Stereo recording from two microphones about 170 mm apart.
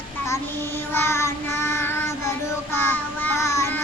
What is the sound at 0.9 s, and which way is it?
Child singing, 15° left (ahead or behind).